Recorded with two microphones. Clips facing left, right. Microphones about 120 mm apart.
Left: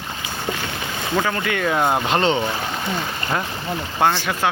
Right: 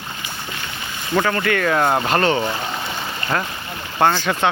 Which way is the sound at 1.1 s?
5° left (ahead or behind).